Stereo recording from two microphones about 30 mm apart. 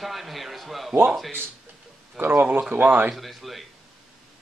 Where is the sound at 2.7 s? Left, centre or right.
Right.